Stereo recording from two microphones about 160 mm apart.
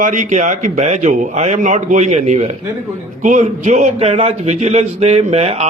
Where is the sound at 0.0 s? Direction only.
55° right (ahead or behind).